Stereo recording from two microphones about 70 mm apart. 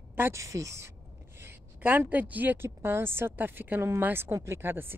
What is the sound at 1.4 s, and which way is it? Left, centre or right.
A woman's voice, right.